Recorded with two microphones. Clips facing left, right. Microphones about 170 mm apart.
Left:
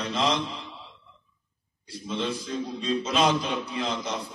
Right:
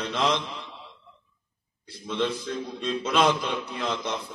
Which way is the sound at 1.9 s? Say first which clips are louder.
Right 2 dB; 60° right (ahead or behind).